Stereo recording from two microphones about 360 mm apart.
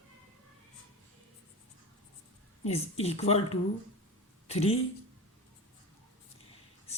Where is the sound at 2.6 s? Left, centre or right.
Centre.